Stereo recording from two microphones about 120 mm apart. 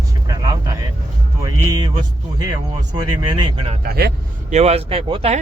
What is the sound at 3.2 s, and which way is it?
Music, 40° right (ahead or behind).